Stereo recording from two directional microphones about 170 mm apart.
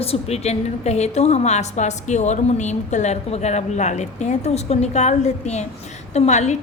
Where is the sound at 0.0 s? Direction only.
35° left (ahead or behind).